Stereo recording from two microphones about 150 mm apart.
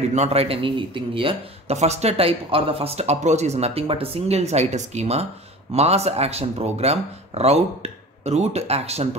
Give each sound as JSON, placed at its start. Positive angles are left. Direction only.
{"t": 0.1, "sound": "a man's voice", "side_deg": -45}